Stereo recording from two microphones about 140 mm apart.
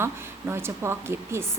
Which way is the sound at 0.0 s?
15° right (ahead or behind).